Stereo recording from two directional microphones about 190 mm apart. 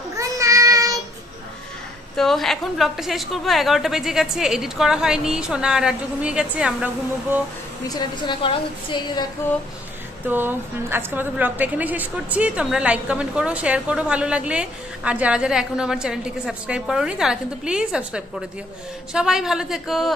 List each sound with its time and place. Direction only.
0.2 s child singing: 15° right (ahead or behind)
2.1 s a woman's voice: centre (ahead or behind)
7.9 s a woman's voice: 25° left (ahead or behind)
10.2 s a woman's voice: 10° right (ahead or behind)